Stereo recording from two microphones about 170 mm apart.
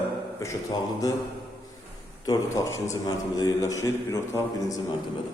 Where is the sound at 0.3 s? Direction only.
20° left (ahead or behind).